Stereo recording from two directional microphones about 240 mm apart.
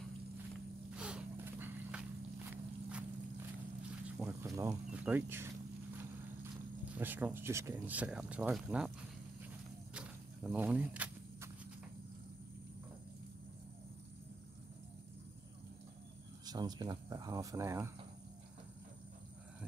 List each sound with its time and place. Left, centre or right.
0.9 s snort: centre
2.5 s walk: centre
4.2 s speech: centre
6.9 s speech: centre
9.9 s walk: centre
16.4 s speech: centre